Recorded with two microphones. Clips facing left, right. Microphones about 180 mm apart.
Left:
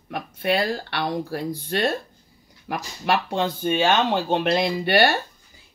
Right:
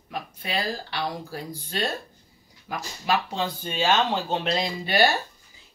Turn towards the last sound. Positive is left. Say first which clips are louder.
# left 3 dB
turn(degrees=60)  # may be behind; listen again after turning